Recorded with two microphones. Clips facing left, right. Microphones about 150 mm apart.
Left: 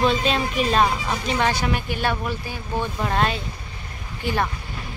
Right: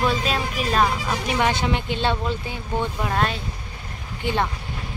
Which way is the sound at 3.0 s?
Centre (ahead or behind).